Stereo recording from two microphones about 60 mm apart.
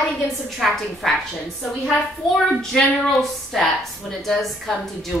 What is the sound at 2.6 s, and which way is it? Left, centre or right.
A woman's voice, centre.